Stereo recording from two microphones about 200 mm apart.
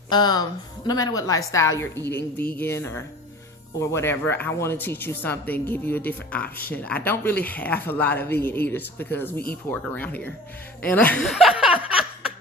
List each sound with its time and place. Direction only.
0.1 s speech: 20° left (ahead or behind); by 11.9 s 5° right (ahead or behind)